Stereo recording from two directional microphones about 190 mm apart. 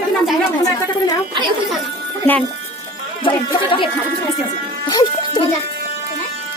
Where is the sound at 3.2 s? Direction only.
25° left (ahead or behind).